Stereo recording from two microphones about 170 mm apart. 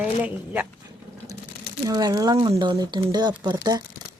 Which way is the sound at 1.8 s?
20° right (ahead or behind).